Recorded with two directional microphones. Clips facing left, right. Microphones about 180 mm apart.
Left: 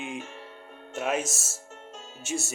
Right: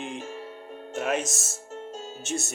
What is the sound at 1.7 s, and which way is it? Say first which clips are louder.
Music: right 10 dB; 35° right (ahead or behind).